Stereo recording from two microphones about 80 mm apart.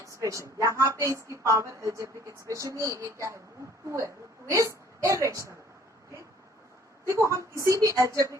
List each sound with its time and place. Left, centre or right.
0.0 s a woman's voice: right
7.1 s a woman's voice: right